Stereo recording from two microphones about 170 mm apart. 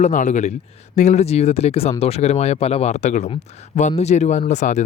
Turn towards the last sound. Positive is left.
turn(degrees=45)  # may be behind; listen again after turning